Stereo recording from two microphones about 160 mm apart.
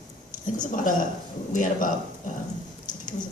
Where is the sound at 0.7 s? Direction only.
55° left (ahead or behind).